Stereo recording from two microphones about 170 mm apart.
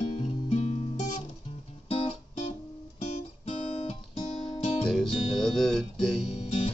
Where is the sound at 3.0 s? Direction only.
40° left (ahead or behind).